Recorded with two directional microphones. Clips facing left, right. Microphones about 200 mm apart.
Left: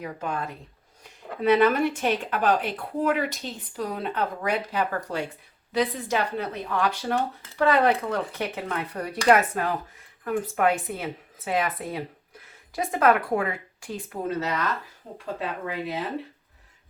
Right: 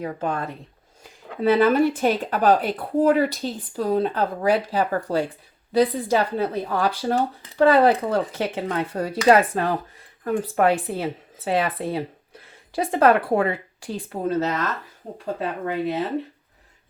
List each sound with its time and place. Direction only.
0.0 s speech: 35° right (ahead or behind)